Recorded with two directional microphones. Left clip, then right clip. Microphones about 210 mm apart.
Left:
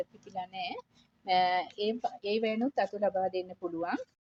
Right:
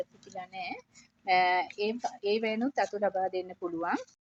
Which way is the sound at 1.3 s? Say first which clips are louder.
Right 1 dB; 10° left (ahead or behind).